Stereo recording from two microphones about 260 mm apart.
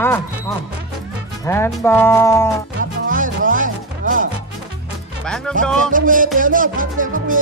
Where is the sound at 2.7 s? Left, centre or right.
Right.